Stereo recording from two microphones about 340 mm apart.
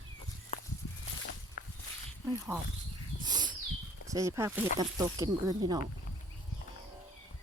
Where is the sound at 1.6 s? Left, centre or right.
Left.